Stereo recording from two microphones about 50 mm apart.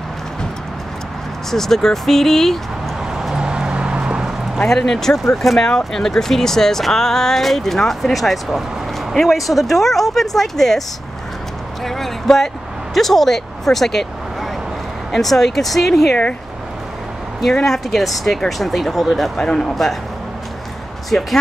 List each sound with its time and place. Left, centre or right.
1.5 s speech: centre
3.2 s a sound: centre
4.6 s speech: centre
11.8 s speech: centre
17.6 s speech: centre
19.4 s speech: centre